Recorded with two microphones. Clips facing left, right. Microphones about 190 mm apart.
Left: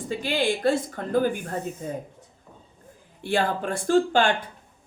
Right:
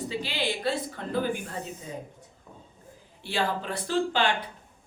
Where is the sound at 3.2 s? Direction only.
50° left (ahead or behind).